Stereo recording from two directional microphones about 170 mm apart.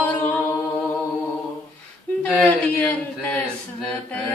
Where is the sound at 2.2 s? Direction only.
5° left (ahead or behind).